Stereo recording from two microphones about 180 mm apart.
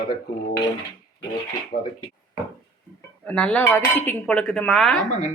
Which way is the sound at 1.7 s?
55° left (ahead or behind).